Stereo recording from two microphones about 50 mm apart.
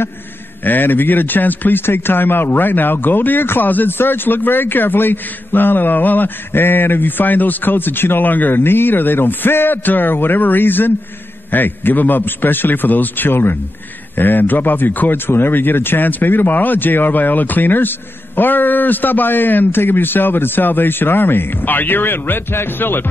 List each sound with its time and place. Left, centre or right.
0.7 s speech: left